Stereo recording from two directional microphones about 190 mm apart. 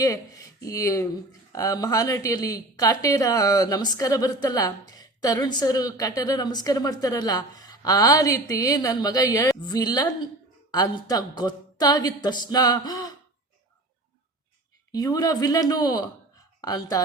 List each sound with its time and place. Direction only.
0.6 s speech: 15° left (ahead or behind)
14.9 s speech: 20° left (ahead or behind)